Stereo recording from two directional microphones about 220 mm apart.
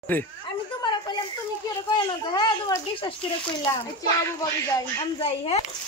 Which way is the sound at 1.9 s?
20° left (ahead or behind).